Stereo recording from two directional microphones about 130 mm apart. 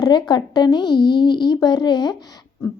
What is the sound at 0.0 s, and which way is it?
Speech, 35° left (ahead or behind).